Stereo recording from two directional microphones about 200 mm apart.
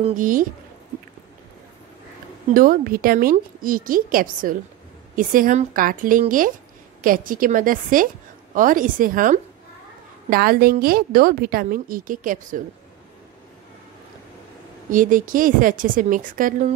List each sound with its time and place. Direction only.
0.0 s a woman's voice: 40° right (ahead or behind)
2.5 s a woman's voice: 45° right (ahead or behind)
14.9 s a woman's voice: 40° right (ahead or behind)